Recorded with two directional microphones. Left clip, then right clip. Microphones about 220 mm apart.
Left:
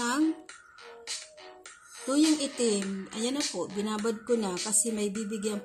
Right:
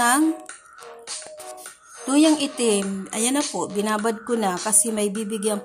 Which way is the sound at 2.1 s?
20° right (ahead or behind).